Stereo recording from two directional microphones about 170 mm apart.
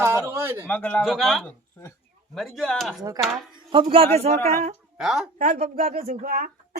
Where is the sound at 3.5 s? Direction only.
30° right (ahead or behind).